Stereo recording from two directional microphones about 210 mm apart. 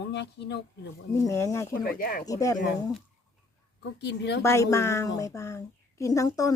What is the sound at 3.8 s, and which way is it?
Speech, 55° left (ahead or behind).